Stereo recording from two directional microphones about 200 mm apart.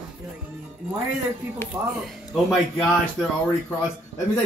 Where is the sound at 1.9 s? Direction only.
5° right (ahead or behind).